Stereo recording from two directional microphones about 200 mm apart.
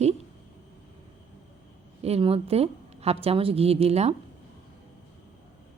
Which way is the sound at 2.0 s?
30° right (ahead or behind).